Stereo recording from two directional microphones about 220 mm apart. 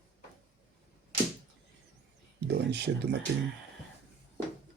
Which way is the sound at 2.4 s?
50° right (ahead or behind).